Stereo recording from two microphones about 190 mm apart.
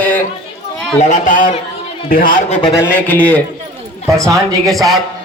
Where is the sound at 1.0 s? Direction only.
40° left (ahead or behind).